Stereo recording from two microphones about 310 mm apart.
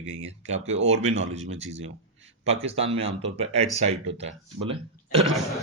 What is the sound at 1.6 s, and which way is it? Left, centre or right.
Speech, right.